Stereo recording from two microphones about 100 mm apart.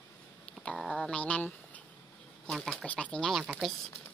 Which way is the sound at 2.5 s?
Centre (ahead or behind).